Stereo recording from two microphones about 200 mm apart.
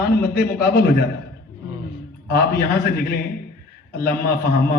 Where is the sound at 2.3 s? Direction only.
50° left (ahead or behind).